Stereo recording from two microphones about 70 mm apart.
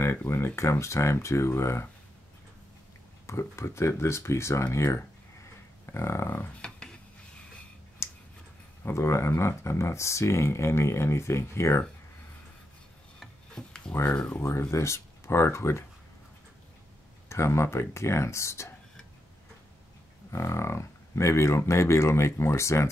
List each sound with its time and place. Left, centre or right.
0.0 s speech: left
3.3 s speech: left
6.6 s a sound: centre
8.0 s clicking: left
8.8 s speech: left
13.6 s a sound: centre
14.1 s speech: centre
14.4 s speech: left
17.3 s speech: left
20.2 s speech: left